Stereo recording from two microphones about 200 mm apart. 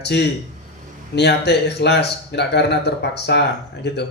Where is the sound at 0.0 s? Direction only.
55° left (ahead or behind).